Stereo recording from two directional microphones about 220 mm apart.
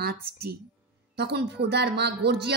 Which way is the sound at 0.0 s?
45° right (ahead or behind).